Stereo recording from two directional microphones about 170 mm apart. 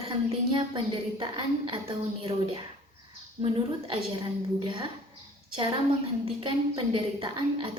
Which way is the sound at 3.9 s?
30° right (ahead or behind).